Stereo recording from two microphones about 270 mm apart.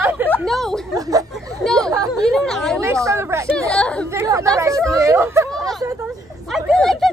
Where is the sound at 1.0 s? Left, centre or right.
Centre.